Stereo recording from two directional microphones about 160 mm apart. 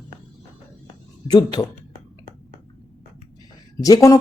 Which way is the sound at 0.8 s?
25° left (ahead or behind).